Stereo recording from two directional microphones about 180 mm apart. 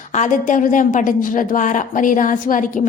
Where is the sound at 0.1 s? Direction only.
45° left (ahead or behind).